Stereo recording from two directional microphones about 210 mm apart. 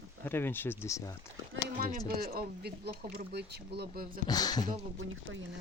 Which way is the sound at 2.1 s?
45° right (ahead or behind).